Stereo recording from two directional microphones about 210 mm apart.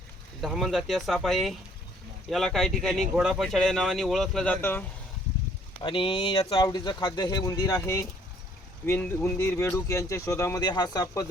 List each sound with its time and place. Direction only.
0.4 s speech: centre (ahead or behind)
5.8 s speech: 25° left (ahead or behind)